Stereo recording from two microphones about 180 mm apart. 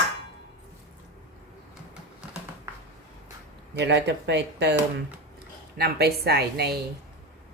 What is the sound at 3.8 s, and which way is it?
Speech, 70° right (ahead or behind).